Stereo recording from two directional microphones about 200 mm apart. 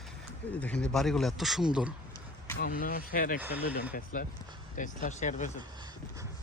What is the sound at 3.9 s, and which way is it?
Speech, 45° left (ahead or behind).